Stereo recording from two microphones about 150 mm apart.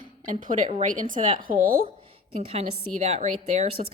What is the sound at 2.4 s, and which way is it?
Speech, 45° right (ahead or behind).